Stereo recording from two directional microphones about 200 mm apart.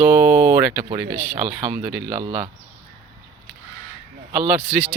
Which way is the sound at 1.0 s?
50° right (ahead or behind).